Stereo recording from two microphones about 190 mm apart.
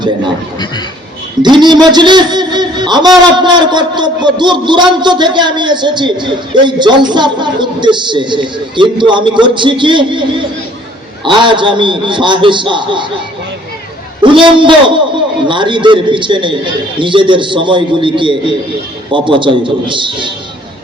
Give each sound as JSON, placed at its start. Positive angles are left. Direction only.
{"t": 1.4, "sound": "a man's voice", "side_deg": -25}
{"t": 14.2, "sound": "a man's voice", "side_deg": -25}